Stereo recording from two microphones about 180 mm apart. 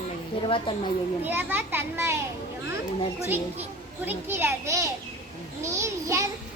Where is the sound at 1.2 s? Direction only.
10° right (ahead or behind).